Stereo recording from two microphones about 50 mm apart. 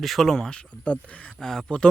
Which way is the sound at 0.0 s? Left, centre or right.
Centre.